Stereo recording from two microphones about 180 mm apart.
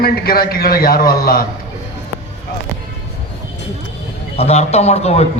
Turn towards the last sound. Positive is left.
turn(degrees=35)  # may be behind; listen again after turning